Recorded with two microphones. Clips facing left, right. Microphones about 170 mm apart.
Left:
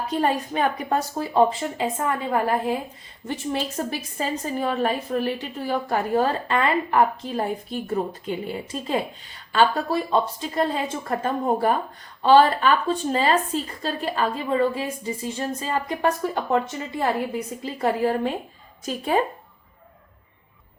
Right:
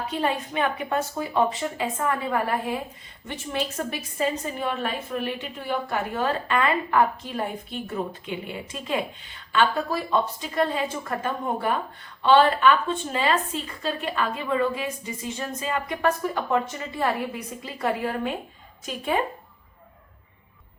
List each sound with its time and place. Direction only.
0.1 s a woman's voice: 40° left (ahead or behind)